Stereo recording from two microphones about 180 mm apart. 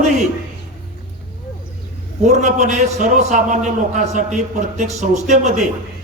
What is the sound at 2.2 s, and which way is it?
A man's voice, 40° right (ahead or behind).